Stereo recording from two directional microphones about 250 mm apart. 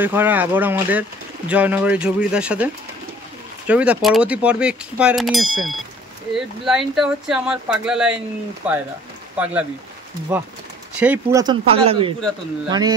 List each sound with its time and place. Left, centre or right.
0.0 s speech: centre
11.0 s speech: centre